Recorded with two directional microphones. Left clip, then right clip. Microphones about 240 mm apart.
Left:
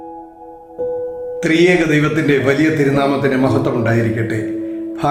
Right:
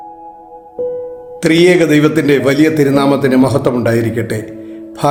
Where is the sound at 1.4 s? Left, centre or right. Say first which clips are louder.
Right 4 dB; right.